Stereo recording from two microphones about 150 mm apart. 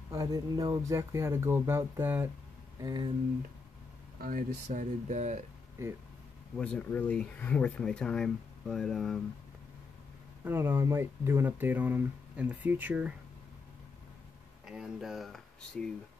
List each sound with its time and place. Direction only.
0.1 s speech: 25° right (ahead or behind)
2.8 s speech: 30° right (ahead or behind)
4.2 s speech: 70° right (ahead or behind); by 5.4 s 50° right (ahead or behind)
6.5 s speech: 10° left (ahead or behind)
10.4 s speech: 15° right (ahead or behind)
14.7 s speech: 5° right (ahead or behind)